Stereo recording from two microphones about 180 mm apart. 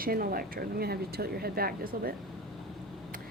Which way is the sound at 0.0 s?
55° right (ahead or behind).